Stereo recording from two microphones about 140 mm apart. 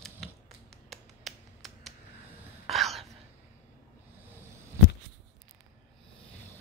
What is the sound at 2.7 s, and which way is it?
Whispering, centre (ahead or behind).